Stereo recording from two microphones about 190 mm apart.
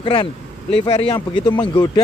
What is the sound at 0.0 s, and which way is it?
Speech, 25° left (ahead or behind).